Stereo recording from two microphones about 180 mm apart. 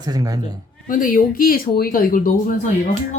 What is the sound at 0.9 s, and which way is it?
Speech, 45° left (ahead or behind).